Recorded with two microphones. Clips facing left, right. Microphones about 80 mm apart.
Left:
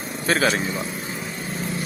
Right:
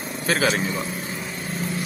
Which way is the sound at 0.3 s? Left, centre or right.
Left.